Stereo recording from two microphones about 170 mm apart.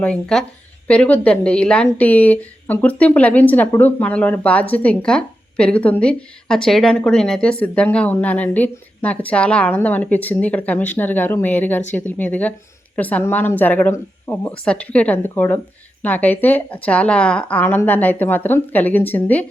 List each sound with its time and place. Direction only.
0.0 s a woman's voice: 5° left (ahead or behind)